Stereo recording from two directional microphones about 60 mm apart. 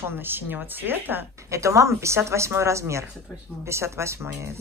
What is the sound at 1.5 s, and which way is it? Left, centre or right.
A woman's voice, right.